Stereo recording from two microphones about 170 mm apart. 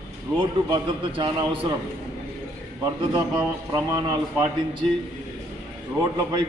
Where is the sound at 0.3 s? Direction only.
30° right (ahead or behind).